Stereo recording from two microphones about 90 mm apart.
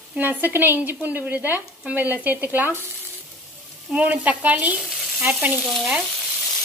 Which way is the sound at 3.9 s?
15° right (ahead or behind).